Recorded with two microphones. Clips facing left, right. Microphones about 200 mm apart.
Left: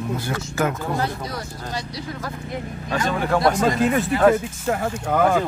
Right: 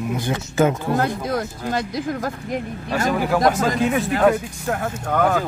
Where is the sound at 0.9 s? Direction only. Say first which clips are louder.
Right 5 dB; 50° right (ahead or behind).